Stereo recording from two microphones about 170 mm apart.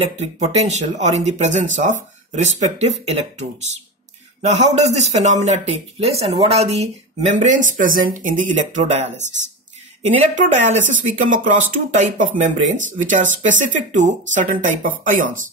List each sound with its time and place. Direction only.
0.0 s speech: 40° right (ahead or behind)
10.3 s speech: 45° right (ahead or behind)